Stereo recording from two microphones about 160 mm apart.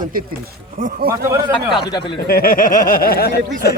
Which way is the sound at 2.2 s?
60° left (ahead or behind).